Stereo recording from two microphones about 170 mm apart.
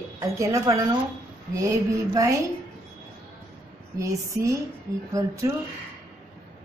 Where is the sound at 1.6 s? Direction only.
20° right (ahead or behind).